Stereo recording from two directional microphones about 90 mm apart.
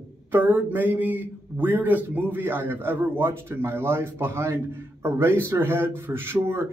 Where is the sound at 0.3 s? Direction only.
20° right (ahead or behind).